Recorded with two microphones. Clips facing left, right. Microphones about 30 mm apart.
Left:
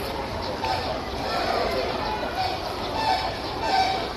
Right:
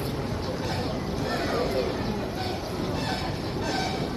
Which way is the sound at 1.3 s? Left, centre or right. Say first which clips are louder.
Left 3 dB; left.